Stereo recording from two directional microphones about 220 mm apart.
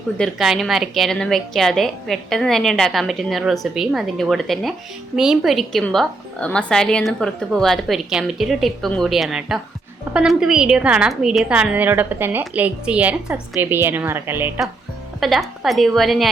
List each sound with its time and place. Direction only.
0.2 s a woman's voice: centre (ahead or behind)